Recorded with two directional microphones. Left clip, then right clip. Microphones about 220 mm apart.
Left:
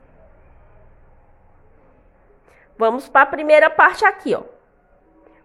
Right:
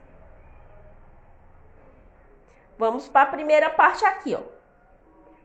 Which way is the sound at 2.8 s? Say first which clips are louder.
Left 5 dB; 40° left (ahead or behind).